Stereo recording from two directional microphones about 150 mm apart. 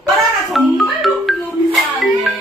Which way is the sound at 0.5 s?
Centre (ahead or behind).